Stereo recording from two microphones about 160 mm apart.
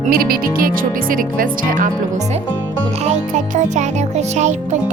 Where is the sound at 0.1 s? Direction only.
65° right (ahead or behind).